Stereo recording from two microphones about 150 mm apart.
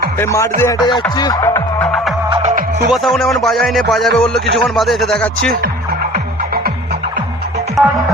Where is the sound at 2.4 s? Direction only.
50° right (ahead or behind).